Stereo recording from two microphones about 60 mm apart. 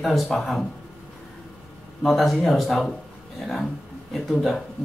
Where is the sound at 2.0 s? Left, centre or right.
Centre.